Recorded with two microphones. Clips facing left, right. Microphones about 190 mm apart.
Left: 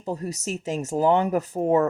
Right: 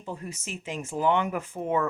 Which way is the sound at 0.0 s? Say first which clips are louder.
Left 7 dB; 40° left (ahead or behind).